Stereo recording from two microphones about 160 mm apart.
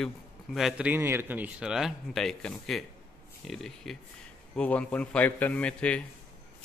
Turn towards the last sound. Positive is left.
turn(degrees=10)  # may be behind; listen again after turning